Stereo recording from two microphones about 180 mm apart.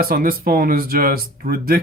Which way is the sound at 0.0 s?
55° right (ahead or behind).